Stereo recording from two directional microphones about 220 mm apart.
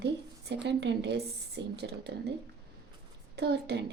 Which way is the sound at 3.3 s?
50° right (ahead or behind).